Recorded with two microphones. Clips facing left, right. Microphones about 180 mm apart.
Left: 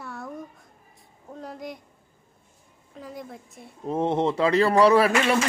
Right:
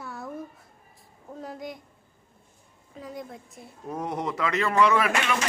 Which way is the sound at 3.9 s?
25° left (ahead or behind).